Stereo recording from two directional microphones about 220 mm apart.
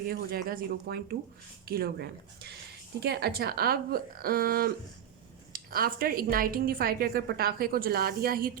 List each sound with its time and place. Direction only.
0.0 s a woman's voice: 40° right (ahead or behind)